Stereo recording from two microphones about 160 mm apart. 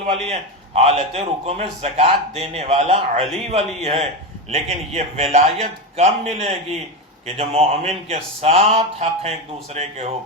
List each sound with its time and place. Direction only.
0.1 s a man's voice: 40° right (ahead or behind)